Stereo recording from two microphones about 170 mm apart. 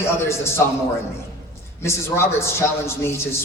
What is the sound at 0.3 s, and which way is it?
Speech, 15° left (ahead or behind).